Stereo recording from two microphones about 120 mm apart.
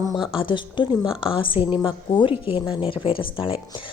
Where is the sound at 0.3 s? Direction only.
45° left (ahead or behind).